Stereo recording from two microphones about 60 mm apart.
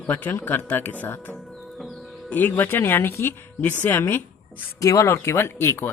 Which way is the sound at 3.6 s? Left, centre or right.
Left.